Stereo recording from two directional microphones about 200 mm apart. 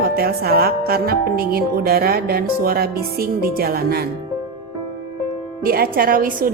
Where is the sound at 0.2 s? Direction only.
50° right (ahead or behind).